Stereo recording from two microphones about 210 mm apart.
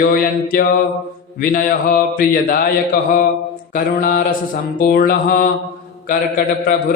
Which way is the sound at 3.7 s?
40° left (ahead or behind).